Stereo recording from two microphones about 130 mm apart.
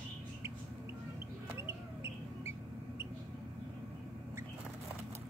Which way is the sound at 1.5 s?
20° right (ahead or behind).